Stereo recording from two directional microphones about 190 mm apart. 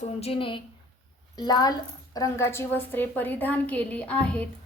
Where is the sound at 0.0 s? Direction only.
30° left (ahead or behind).